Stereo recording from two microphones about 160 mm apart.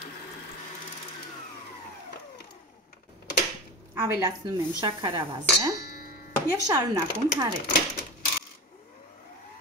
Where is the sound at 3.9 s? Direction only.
15° right (ahead or behind).